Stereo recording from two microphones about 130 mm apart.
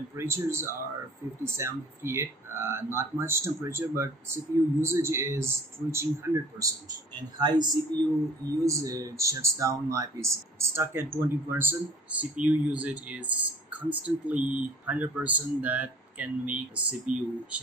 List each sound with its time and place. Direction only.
0.1 s speech: 20° right (ahead or behind)
7.2 s speech: 35° right (ahead or behind); by 17.6 s 10° right (ahead or behind)